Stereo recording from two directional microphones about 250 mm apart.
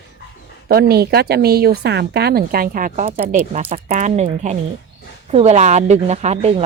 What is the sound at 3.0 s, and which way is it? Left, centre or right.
Speech, right.